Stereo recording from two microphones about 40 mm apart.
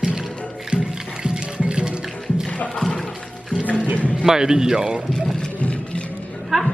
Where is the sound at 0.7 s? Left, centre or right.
Right.